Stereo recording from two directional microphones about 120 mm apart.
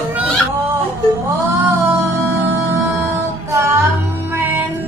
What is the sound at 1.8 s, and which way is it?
Music, 25° right (ahead or behind).